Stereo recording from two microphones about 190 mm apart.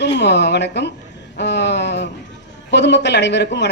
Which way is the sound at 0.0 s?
65° left (ahead or behind).